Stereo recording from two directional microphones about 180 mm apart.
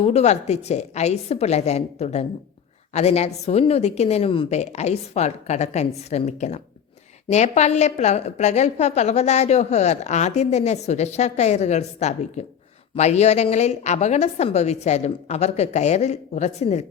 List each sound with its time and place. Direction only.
0.0 s a woman's voice: 35° left (ahead or behind)